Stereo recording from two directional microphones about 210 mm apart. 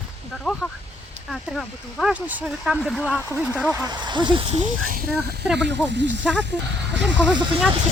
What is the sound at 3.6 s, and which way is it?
Speech, 15° right (ahead or behind).